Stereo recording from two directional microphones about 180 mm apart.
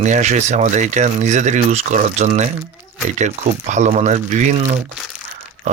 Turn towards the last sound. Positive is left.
turn(degrees=-40)  # may be behind; listen again after turning